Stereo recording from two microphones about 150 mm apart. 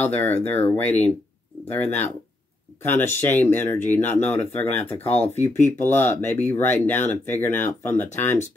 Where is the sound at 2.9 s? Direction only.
15° left (ahead or behind).